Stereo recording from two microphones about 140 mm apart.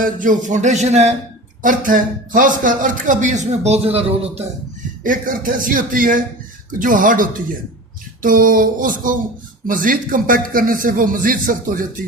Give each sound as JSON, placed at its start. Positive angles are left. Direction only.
{"t": 0.0, "sound": "speech", "side_deg": -70}
{"t": 1.6, "sound": "speech", "side_deg": -75}
{"t": 5.0, "sound": "speech", "side_deg": -75}